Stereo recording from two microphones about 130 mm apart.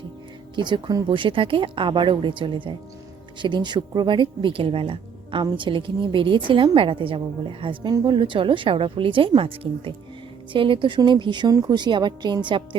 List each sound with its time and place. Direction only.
0.5 s a woman's voice: 35° right (ahead or behind)